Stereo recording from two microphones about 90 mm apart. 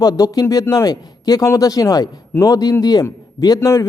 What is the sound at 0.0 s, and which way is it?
Speech, 45° left (ahead or behind).